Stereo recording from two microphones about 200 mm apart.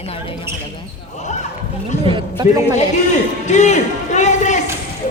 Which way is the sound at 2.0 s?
25° right (ahead or behind).